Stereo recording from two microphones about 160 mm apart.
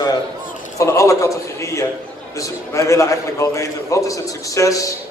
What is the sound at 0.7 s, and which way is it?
A man's voice, 20° left (ahead or behind).